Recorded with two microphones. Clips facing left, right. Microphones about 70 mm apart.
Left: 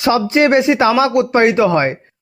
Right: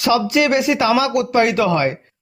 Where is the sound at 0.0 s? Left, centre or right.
Left.